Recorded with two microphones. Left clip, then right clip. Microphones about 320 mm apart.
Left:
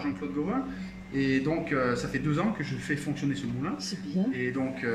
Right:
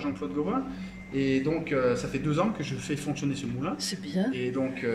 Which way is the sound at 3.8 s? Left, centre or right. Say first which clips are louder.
Right 2 dB; right.